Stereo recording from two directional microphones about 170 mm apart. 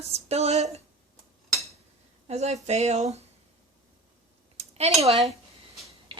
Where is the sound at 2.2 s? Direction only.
40° right (ahead or behind).